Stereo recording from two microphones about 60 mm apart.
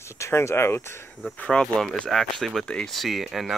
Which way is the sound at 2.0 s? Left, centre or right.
Centre.